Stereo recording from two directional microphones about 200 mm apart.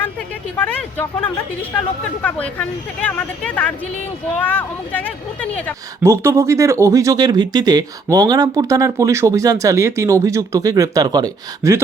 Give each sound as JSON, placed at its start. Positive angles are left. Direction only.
{"t": 0.6, "sound": "speech", "side_deg": 5}
{"t": 2.2, "sound": "speech", "side_deg": 5}
{"t": 6.0, "sound": "speech", "side_deg": -15}